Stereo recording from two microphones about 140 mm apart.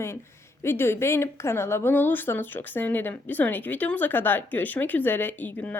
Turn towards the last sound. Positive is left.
turn(degrees=10)  # may be behind; listen again after turning